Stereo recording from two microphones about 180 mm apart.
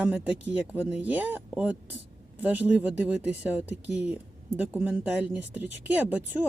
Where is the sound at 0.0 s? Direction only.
5° right (ahead or behind).